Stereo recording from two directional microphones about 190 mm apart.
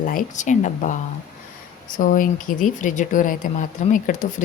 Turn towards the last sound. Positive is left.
turn(degrees=40)  # may be behind; listen again after turning